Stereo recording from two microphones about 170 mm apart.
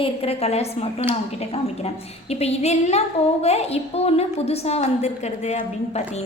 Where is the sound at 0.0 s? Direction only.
35° left (ahead or behind).